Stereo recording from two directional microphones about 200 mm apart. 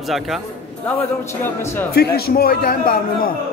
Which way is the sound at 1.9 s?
50° left (ahead or behind).